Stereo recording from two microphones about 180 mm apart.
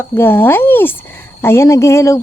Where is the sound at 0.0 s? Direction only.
10° left (ahead or behind).